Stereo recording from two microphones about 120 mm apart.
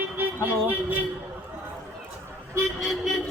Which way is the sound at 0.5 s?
15° right (ahead or behind).